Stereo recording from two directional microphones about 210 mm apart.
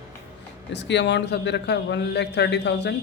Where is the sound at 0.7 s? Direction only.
55° left (ahead or behind).